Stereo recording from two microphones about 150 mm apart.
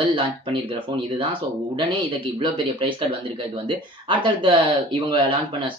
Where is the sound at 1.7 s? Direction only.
35° right (ahead or behind).